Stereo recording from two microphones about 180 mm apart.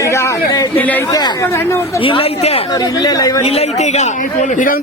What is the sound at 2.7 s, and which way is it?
Speech, 20° left (ahead or behind).